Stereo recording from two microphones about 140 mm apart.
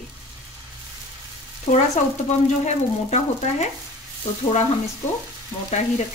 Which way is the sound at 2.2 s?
55° left (ahead or behind).